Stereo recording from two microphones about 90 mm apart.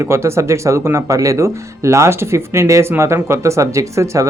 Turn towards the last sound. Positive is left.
turn(degrees=-35)  # may be behind; listen again after turning